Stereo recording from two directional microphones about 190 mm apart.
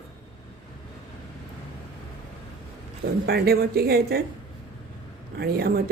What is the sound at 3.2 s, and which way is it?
Speech, 55° right (ahead or behind).